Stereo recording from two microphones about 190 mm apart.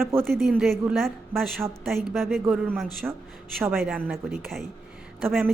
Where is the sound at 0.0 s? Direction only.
15° right (ahead or behind).